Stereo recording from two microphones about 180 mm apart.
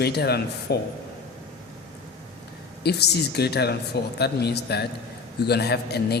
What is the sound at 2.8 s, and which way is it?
Speech, 65° left (ahead or behind).